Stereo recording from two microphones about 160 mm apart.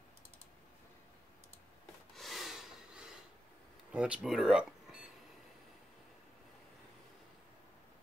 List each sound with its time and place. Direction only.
2.1 s snort: centre (ahead or behind)
3.9 s speech: 5° right (ahead or behind)